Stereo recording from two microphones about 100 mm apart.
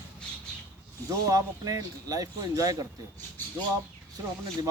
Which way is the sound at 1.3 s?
35° right (ahead or behind).